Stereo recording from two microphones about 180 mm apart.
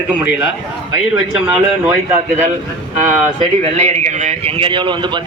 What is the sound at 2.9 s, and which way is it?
A man's voice, 35° right (ahead or behind).